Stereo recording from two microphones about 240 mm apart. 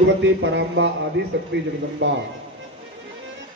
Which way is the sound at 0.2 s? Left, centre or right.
Right.